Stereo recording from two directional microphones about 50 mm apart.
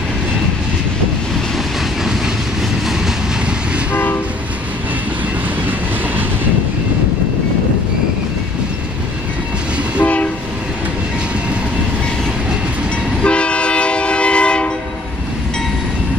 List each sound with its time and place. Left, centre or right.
3.9 s train: left
10.0 s train: left
13.2 s train: left